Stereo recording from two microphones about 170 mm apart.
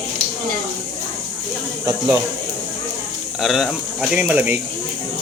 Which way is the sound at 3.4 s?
Centre (ahead or behind).